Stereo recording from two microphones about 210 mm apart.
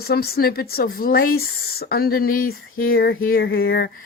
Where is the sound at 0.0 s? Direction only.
50° left (ahead or behind).